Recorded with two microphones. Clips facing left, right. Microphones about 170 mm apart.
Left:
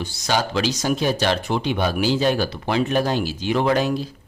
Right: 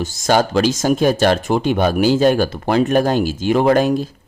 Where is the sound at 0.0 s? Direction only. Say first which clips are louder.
Right 7 dB; 45° right (ahead or behind).